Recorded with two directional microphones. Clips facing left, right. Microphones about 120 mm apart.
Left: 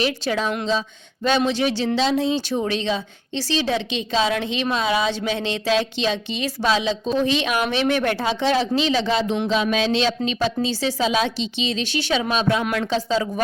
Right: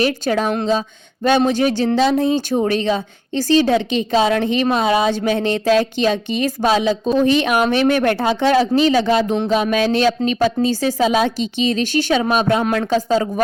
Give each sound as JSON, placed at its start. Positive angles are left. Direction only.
{"t": 0.0, "sound": "speech", "side_deg": -50}